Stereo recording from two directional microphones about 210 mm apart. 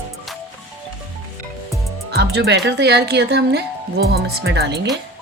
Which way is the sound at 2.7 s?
50° right (ahead or behind).